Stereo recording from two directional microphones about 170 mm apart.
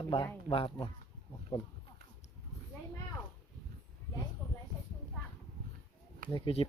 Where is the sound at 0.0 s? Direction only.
30° left (ahead or behind).